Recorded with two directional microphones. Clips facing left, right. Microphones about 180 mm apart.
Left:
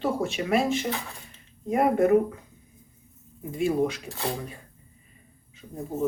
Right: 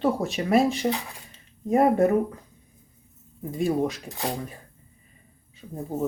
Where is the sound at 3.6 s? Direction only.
35° right (ahead or behind).